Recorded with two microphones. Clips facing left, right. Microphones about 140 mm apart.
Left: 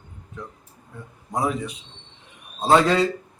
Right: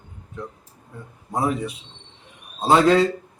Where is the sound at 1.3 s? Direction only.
5° right (ahead or behind).